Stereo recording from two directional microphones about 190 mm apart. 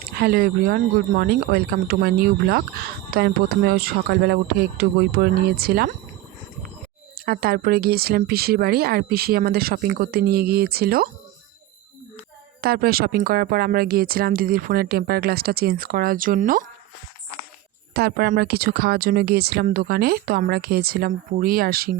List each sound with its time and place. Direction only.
0.1 s speech: 55° right (ahead or behind)
7.3 s speech: 50° right (ahead or behind)
12.6 s speech: 50° right (ahead or behind)
17.9 s speech: 55° right (ahead or behind)